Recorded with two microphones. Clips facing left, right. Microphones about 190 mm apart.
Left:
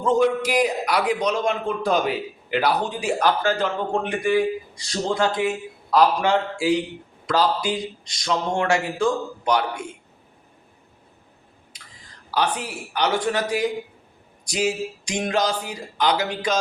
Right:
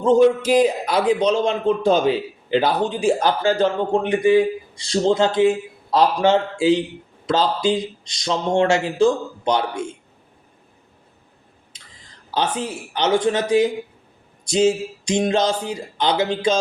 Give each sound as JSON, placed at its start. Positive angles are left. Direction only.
{"t": 0.0, "sound": "a man's voice", "side_deg": -25}
{"t": 11.7, "sound": "a sound", "side_deg": -25}
{"t": 12.3, "sound": "a man's voice", "side_deg": -25}